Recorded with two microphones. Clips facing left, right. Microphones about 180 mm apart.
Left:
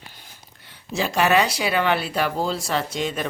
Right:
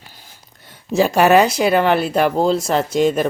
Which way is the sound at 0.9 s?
45° right (ahead or behind).